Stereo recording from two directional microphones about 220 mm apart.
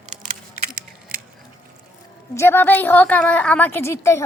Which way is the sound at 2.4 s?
10° left (ahead or behind).